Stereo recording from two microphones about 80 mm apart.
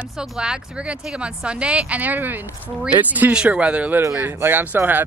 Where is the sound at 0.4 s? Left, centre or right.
Centre.